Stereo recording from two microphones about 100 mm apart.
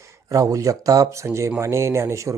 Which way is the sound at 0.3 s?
35° right (ahead or behind).